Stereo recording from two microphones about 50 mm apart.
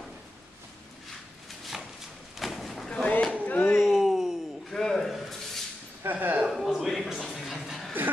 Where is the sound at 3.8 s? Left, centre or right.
Centre.